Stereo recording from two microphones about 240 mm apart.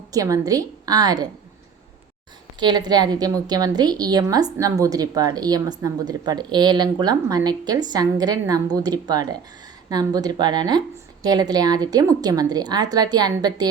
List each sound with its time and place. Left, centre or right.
0.1 s a woman's voice: centre
2.6 s a woman's voice: centre